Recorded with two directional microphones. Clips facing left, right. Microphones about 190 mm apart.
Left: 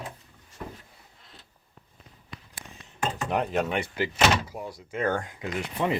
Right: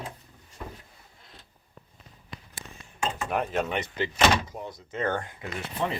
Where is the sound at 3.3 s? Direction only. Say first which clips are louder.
Left 2 dB; 15° left (ahead or behind).